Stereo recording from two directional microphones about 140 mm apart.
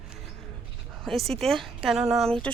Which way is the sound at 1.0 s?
Centre (ahead or behind).